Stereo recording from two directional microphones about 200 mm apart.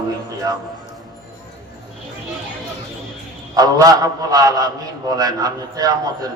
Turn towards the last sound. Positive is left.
turn(degrees=-20)  # may be behind; listen again after turning